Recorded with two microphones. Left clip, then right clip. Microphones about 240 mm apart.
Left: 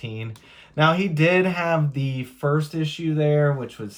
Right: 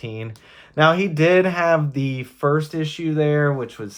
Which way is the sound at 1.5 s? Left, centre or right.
Right.